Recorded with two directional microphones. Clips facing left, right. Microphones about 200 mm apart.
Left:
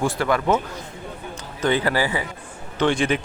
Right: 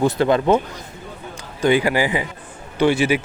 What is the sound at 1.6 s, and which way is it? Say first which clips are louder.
Speech: right 4 dB; 10° right (ahead or behind).